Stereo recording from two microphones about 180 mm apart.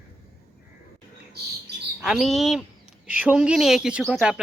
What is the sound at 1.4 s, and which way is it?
Bird, 65° right (ahead or behind).